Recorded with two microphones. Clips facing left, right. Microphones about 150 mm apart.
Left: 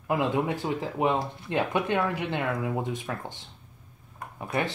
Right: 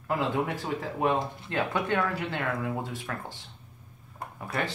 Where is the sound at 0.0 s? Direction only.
15° left (ahead or behind).